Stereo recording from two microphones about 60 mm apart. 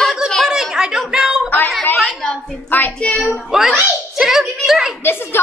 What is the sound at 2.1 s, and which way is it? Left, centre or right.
Speech, centre.